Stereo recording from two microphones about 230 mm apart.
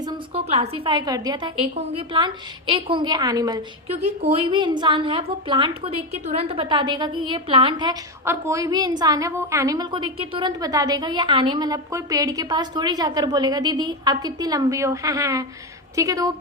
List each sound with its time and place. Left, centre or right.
0.0 s a woman's voice: right